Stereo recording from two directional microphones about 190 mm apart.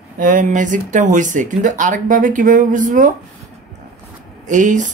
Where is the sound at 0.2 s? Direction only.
40° right (ahead or behind).